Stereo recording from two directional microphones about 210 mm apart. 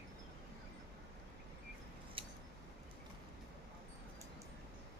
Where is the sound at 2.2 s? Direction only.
25° right (ahead or behind).